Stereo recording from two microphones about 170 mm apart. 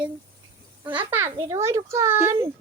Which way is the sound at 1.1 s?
15° right (ahead or behind).